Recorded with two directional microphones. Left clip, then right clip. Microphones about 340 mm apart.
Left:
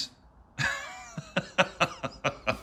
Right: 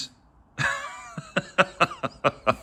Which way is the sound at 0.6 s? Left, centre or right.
Centre.